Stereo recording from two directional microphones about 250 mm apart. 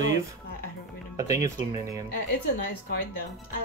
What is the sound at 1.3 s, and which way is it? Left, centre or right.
Speech, centre.